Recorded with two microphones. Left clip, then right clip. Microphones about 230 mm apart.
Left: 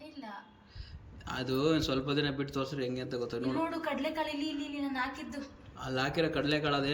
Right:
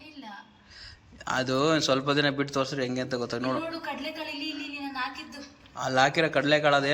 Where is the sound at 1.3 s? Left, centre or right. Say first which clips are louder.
Right 6 dB; centre.